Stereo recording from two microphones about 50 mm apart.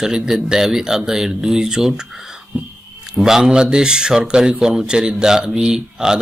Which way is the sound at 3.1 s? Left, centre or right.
Centre.